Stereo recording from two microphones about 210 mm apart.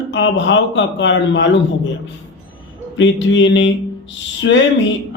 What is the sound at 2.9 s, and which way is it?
A man's voice, 60° left (ahead or behind).